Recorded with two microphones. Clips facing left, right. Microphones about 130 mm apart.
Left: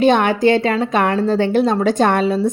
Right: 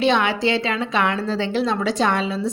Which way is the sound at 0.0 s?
50° left (ahead or behind).